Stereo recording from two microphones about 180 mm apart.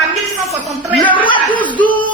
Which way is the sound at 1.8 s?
25° left (ahead or behind).